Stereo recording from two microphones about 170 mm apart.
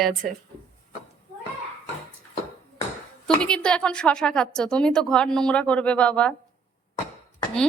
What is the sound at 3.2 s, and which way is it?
A woman's voice, 5° left (ahead or behind).